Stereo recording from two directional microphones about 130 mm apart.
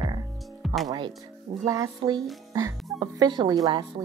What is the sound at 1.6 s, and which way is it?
Speech, 25° right (ahead or behind).